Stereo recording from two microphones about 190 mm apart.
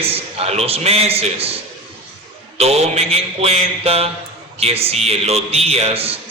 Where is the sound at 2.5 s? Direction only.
35° right (ahead or behind).